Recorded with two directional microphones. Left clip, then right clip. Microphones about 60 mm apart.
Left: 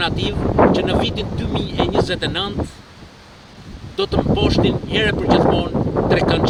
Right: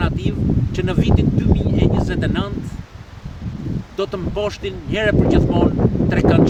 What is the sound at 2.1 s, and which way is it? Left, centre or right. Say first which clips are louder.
Speech: left 2 dB; right.